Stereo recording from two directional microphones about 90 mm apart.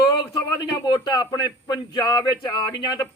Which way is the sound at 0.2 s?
60° left (ahead or behind).